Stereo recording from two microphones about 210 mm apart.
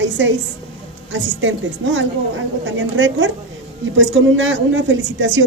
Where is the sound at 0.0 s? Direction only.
60° right (ahead or behind).